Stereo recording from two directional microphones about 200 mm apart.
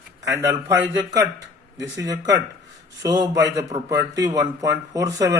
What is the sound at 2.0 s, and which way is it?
Speech, 15° right (ahead or behind).